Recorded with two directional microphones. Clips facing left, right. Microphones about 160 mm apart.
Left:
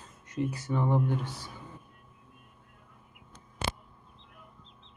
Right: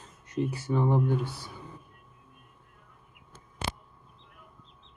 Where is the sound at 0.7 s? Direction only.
15° right (ahead or behind).